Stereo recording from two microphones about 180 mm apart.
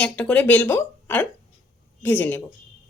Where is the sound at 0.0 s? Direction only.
5° left (ahead or behind).